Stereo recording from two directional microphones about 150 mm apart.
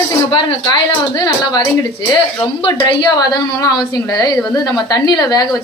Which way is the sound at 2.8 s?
30° left (ahead or behind).